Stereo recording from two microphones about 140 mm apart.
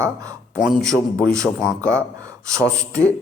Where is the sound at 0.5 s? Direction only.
Centre (ahead or behind).